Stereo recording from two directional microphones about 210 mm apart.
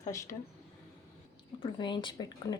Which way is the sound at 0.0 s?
15° left (ahead or behind).